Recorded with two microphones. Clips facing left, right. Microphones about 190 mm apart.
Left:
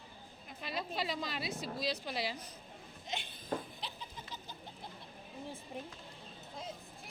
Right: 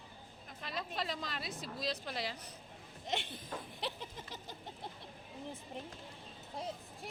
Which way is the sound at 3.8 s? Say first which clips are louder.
Right 5 dB; 75° right (ahead or behind).